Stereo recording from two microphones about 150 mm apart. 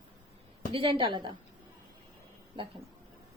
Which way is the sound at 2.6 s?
35° right (ahead or behind).